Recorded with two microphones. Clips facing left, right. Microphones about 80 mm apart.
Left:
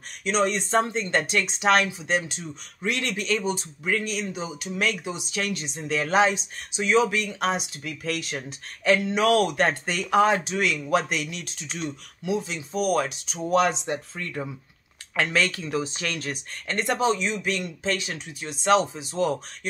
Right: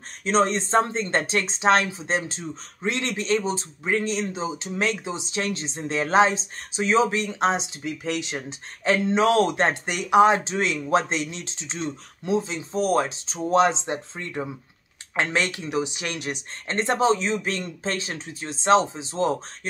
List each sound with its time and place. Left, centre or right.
0.2 s speech: right